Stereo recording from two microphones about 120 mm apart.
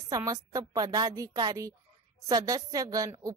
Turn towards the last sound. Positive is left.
turn(degrees=-30)  # may be behind; listen again after turning